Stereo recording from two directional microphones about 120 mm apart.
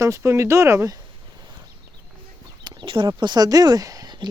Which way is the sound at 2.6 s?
40° right (ahead or behind).